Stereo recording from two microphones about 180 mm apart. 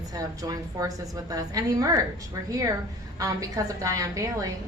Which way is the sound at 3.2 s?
20° right (ahead or behind).